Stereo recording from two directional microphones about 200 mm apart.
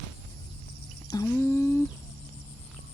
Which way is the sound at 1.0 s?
15° left (ahead or behind).